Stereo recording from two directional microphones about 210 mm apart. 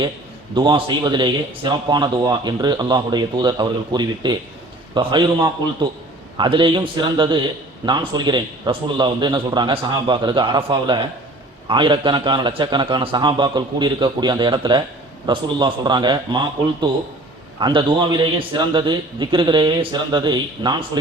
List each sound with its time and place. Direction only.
0.5 s a man's voice: 20° right (ahead or behind)